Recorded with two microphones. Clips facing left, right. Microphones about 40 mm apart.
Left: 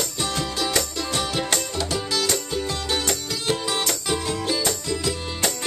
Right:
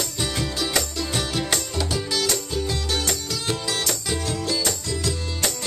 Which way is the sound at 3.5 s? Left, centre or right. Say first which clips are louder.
Left 3 dB; centre.